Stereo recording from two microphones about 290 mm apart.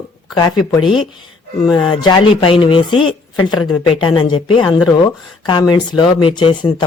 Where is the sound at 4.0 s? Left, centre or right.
Centre.